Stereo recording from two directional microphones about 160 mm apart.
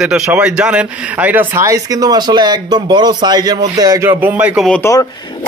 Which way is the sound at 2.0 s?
25° right (ahead or behind).